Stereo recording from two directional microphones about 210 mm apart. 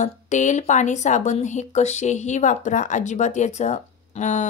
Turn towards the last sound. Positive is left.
turn(degrees=35)  # may be behind; listen again after turning